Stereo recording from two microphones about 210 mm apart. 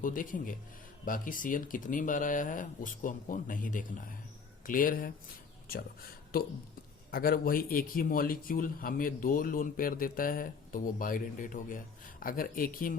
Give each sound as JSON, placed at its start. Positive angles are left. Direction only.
{"t": 0.0, "sound": "speech", "side_deg": 40}
{"t": 7.1, "sound": "speech", "side_deg": 45}